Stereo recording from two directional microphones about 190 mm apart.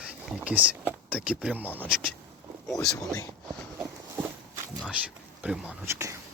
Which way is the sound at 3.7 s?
10° right (ahead or behind).